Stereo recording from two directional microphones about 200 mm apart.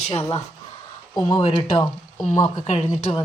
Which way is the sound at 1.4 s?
30° left (ahead or behind).